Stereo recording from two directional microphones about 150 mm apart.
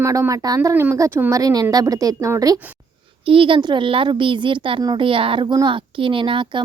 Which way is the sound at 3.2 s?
35° right (ahead or behind).